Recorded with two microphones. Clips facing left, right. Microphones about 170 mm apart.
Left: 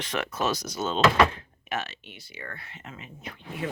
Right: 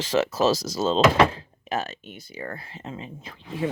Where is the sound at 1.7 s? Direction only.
40° right (ahead or behind).